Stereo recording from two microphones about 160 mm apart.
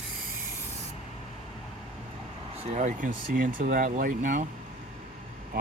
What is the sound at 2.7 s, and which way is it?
Speech, 50° right (ahead or behind).